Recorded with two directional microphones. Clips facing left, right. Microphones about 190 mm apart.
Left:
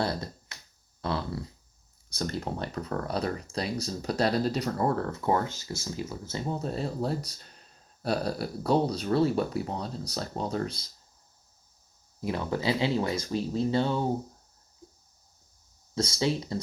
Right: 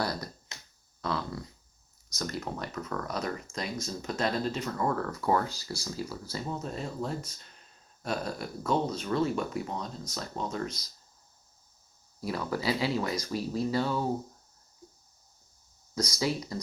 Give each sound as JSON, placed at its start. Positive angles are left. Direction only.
{"t": 0.0, "sound": "finger snapping", "side_deg": 25}
{"t": 1.0, "sound": "a sound", "side_deg": 30}
{"t": 2.0, "sound": "speech", "side_deg": 30}
{"t": 12.2, "sound": "speech", "side_deg": 25}
{"t": 16.0, "sound": "speech", "side_deg": 25}